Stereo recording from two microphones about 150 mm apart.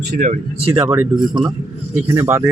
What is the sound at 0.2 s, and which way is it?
Speech, 55° right (ahead or behind).